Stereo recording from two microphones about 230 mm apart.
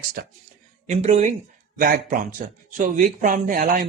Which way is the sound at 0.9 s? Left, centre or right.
Right.